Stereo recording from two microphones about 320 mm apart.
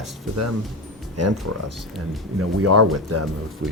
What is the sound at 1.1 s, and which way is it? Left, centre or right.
Speech, right.